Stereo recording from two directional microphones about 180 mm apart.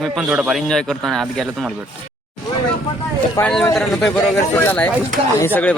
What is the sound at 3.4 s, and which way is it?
A man's voice, 10° left (ahead or behind).